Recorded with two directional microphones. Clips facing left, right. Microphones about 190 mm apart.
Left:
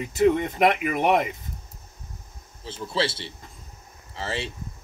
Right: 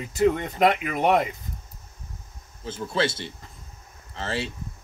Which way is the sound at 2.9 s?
30° left (ahead or behind).